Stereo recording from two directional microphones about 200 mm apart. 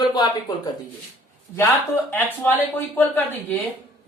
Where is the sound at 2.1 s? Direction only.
10° left (ahead or behind).